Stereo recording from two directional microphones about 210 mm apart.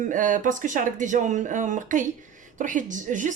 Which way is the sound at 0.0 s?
40° right (ahead or behind).